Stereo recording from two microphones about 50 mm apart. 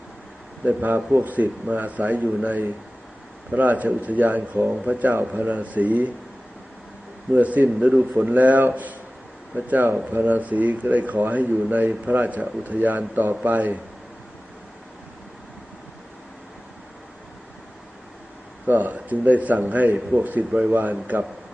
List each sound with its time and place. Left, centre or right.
0.6 s a man's voice: right
7.3 s a man's voice: right
18.6 s a man's voice: right